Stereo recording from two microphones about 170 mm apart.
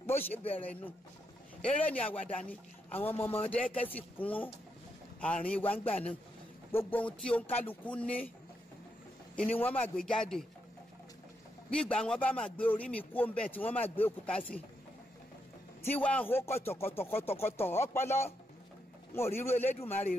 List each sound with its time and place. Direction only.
0.0 s a sound: 15° left (ahead or behind)
0.3 s a man's voice: 35° left (ahead or behind)
1.6 s a man's voice: 10° left (ahead or behind)
9.3 s a man's voice: 10° left (ahead or behind)
11.7 s a man's voice: 5° left (ahead or behind)
15.8 s a man's voice: 10° left (ahead or behind)
19.5 s a man's voice: 40° left (ahead or behind)